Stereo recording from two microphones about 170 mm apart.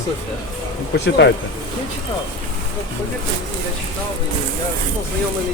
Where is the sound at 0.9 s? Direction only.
85° left.